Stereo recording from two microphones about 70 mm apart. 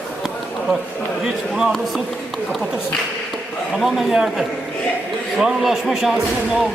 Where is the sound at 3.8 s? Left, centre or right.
Centre.